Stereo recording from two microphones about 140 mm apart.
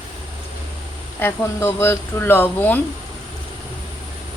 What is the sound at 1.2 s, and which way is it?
Speech, 15° left (ahead or behind).